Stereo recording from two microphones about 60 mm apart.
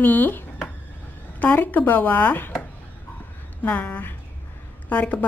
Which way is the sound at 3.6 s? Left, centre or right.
Left.